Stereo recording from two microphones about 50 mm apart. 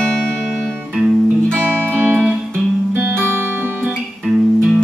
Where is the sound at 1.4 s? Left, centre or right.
Right.